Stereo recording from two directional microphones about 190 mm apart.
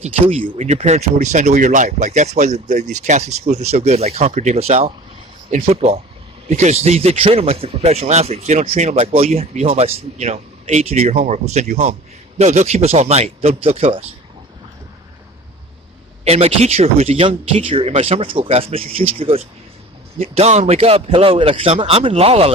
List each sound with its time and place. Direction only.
0.5 s speech: 35° right (ahead or behind)
16.2 s speech: 35° right (ahead or behind)